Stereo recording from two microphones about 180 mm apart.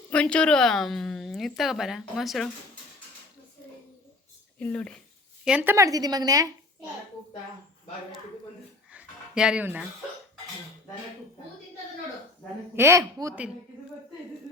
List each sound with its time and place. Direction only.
0.1 s speech: 5° left (ahead or behind)
4.6 s speech: 5° left (ahead or behind)
5.5 s speech: 10° right (ahead or behind)
8.9 s a sound: 5° right (ahead or behind)
12.7 s a woman's voice: 15° right (ahead or behind)